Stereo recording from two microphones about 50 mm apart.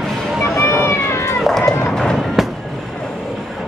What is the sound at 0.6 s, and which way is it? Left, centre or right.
Cat, left.